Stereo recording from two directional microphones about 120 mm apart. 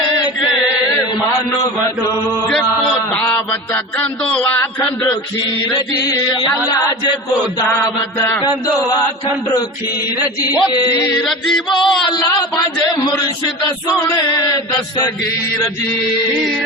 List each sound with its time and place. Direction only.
3.2 s a sound: 20° left (ahead or behind)
4.2 s a man's voice: 5° left (ahead or behind)
6.1 s chant: 30° left (ahead or behind)
10.5 s chant: 30° left (ahead or behind)
11.3 s music: centre (ahead or behind)
12.1 s a sound: 35° left (ahead or behind)